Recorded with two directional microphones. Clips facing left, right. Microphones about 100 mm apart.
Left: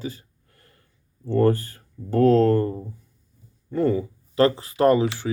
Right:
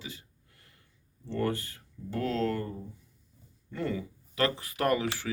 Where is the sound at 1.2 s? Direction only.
40° left (ahead or behind).